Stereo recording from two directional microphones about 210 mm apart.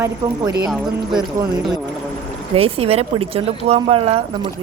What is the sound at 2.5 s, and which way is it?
Speech, 30° right (ahead or behind).